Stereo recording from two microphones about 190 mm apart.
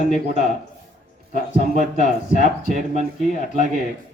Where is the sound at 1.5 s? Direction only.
45° right (ahead or behind).